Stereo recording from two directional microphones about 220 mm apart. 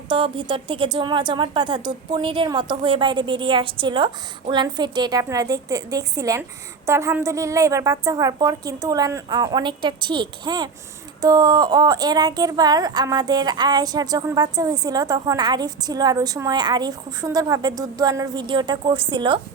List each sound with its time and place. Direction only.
0.1 s a woman's voice: 20° right (ahead or behind)